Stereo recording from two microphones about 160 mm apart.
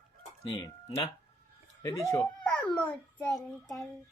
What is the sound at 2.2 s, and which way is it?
Babbling, 10° left (ahead or behind).